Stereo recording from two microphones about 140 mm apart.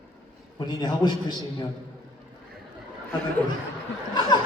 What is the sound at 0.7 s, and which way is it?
Speech, 30° left (ahead or behind).